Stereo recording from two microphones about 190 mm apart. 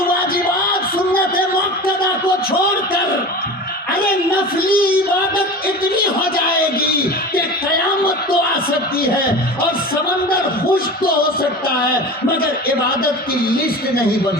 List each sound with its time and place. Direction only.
4.6 s speech: 50° left (ahead or behind)
6.3 s music: 50° left (ahead or behind)
9.6 s speech: 50° left (ahead or behind)
12.4 s speech: 50° left (ahead or behind)